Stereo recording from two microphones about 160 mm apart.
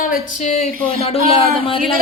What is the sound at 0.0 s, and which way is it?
A man's voice, 60° left (ahead or behind).